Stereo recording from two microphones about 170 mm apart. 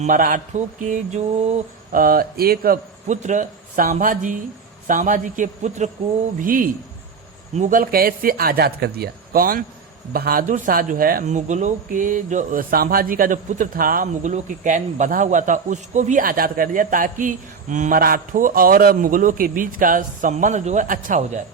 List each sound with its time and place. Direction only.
0.0 s speech: 55° right (ahead or behind)
2.0 s a man's voice: 60° right (ahead or behind)